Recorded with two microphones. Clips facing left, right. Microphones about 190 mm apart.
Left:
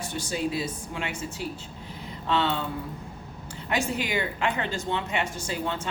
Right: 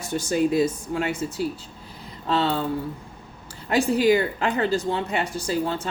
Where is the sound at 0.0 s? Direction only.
45° right (ahead or behind).